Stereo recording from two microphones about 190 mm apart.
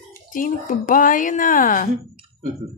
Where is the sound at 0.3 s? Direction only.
45° left (ahead or behind).